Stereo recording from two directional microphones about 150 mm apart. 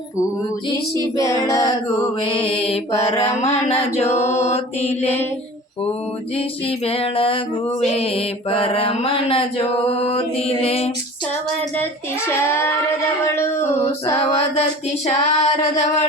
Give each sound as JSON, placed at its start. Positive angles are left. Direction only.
{"t": 1.1, "sound": "female singing", "side_deg": 20}
{"t": 2.3, "sound": "mantra", "side_deg": 40}
{"t": 6.7, "sound": "mantra", "side_deg": 40}
{"t": 13.2, "sound": "female singing", "side_deg": 15}
{"t": 14.2, "sound": "mantra", "side_deg": 40}